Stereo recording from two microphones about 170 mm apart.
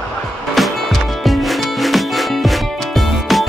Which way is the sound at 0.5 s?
Centre (ahead or behind).